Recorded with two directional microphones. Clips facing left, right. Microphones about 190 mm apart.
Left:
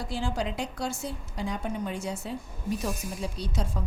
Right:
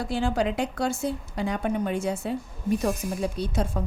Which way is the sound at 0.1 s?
60° right (ahead or behind).